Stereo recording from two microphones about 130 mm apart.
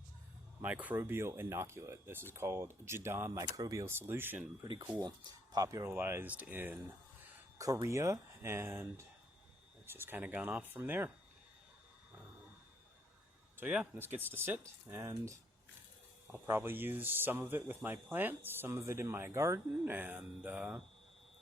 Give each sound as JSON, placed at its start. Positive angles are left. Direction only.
{"t": 0.6, "sound": "speech", "side_deg": -10}
{"t": 4.6, "sound": "speech", "side_deg": -35}
{"t": 13.6, "sound": "speech", "side_deg": -10}
{"t": 16.2, "sound": "speech", "side_deg": -15}